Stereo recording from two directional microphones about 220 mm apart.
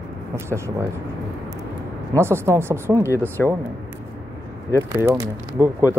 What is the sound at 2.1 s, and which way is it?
Speech, 10° right (ahead or behind).